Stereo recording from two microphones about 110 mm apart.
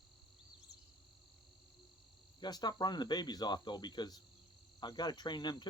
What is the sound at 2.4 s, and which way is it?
Speech, 40° left (ahead or behind).